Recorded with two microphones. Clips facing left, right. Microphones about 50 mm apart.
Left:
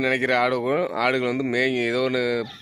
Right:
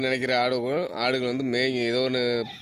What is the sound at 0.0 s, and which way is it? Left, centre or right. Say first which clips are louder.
Speech: left 3 dB; left.